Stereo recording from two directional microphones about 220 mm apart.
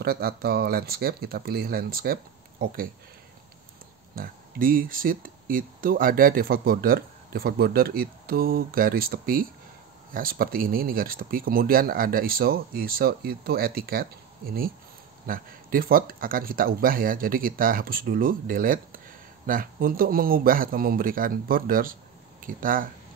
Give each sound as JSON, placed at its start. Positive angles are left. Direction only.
{"t": 0.0, "sound": "speech", "side_deg": -45}
{"t": 4.1, "sound": "speech", "side_deg": -40}